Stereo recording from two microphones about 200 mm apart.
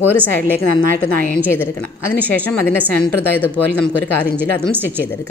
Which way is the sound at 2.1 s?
5° left (ahead or behind).